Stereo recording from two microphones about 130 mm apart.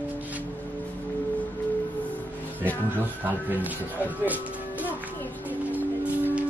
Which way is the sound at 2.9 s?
15° right (ahead or behind).